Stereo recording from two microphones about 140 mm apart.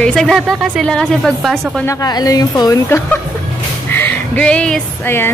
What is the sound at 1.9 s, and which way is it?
A woman's voice, 25° left (ahead or behind).